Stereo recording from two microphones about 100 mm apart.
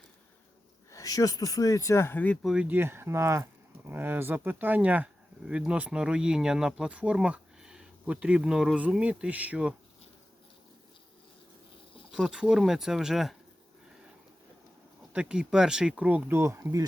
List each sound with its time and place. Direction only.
0.9 s speech: 35° left (ahead or behind); by 2.4 s 15° left (ahead or behind)
2.4 s speech: 5° right (ahead or behind)
2.6 s speech: 20° right (ahead or behind)
12.1 s speech: 5° right (ahead or behind)
15.1 s speech: 10° right (ahead or behind); by 16.8 s 30° right (ahead or behind)